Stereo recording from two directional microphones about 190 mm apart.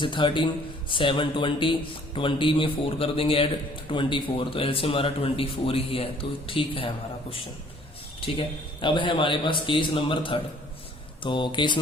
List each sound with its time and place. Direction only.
0.0 s speech: 25° left (ahead or behind)
8.4 s speech: 25° left (ahead or behind)